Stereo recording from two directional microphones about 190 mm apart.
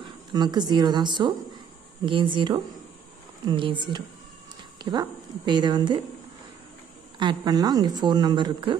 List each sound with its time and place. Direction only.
0.3 s speech: 20° right (ahead or behind)
7.2 s speech: 20° right (ahead or behind)